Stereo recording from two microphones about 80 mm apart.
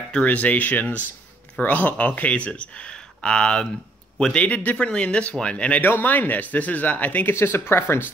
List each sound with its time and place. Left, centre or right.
0.1 s speech: centre